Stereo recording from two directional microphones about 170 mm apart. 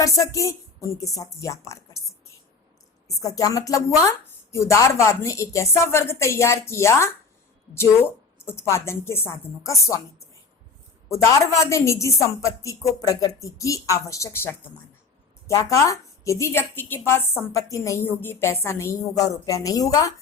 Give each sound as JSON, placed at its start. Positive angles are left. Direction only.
{"t": 0.0, "sound": "a woman's voice", "side_deg": 20}
{"t": 3.1, "sound": "a woman's voice", "side_deg": 20}
{"t": 8.4, "sound": "a woman's voice", "side_deg": 15}